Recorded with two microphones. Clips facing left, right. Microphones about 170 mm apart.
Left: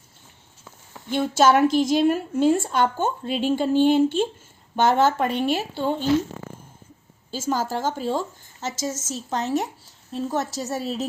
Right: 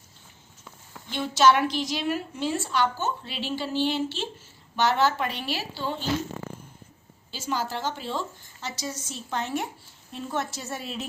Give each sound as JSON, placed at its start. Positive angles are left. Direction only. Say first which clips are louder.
{"t": 1.1, "sound": "a woman's voice", "louder": "left 3 dB", "side_deg": 50}
{"t": 7.3, "sound": "a woman's voice", "louder": "left 5 dB", "side_deg": 45}